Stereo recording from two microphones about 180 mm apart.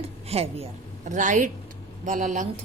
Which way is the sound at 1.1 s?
45° right (ahead or behind).